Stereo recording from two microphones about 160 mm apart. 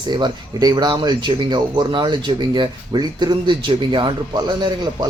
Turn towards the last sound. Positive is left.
turn(degrees=-30)  # may be behind; listen again after turning